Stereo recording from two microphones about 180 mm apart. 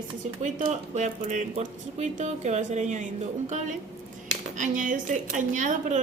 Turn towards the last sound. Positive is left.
turn(degrees=-45)  # may be behind; listen again after turning